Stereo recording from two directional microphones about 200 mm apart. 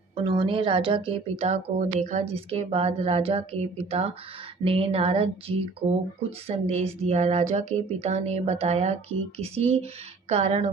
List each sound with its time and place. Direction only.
0.2 s a woman's voice: 25° right (ahead or behind)